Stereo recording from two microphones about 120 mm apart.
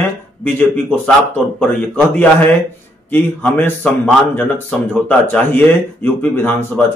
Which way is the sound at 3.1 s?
15° left (ahead or behind).